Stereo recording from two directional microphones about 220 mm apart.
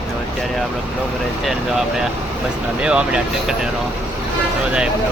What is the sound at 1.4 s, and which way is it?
Speech, centre (ahead or behind).